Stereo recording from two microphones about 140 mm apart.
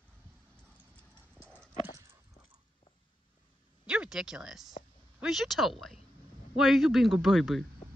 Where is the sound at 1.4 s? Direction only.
10° right (ahead or behind).